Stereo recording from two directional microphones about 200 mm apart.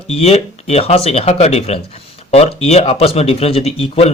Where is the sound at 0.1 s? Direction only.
30° left (ahead or behind).